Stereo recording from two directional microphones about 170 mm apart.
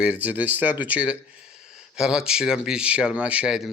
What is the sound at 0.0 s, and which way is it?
Speech, 5° right (ahead or behind).